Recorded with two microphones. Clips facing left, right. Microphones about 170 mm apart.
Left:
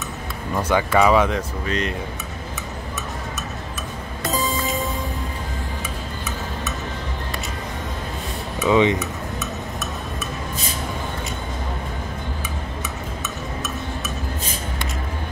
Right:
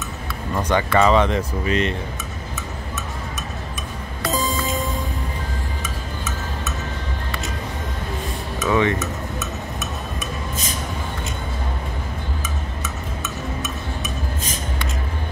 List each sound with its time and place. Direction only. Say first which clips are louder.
0.6 s speech: even; 10° left (ahead or behind)
4.3 s music: right 1 dB; centre (ahead or behind)
8.6 s speech: left 3 dB; 15° left (ahead or behind)